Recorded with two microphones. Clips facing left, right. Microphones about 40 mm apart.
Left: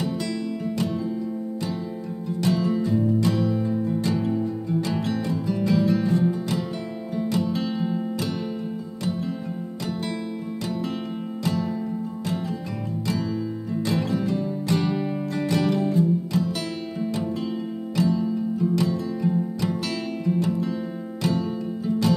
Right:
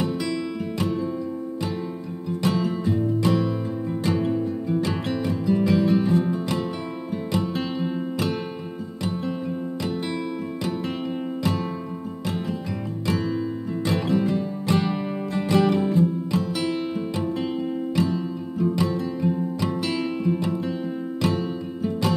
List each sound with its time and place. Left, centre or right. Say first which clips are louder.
2.4 s music: left 1 dB; right
11.4 s music: left 1 dB; right
13.8 s music: right 2 dB; right
17.9 s music: left 5 dB; right